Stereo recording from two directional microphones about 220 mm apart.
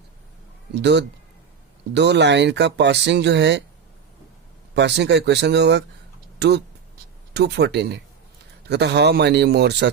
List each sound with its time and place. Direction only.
0.8 s speech: 50° right (ahead or behind)
4.7 s speech: 50° right (ahead or behind)
7.3 s speech: 50° right (ahead or behind)